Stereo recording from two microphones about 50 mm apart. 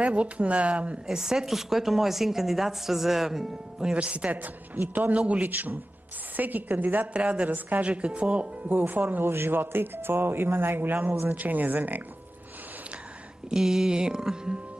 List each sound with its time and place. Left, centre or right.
0.0 s speech: right
1.0 s a woman's voice: centre
3.9 s speech: right
5.5 s speech: right
7.2 s speech: right
8.6 s speech: right
9.2 s speech: right
13.5 s a woman's voice: centre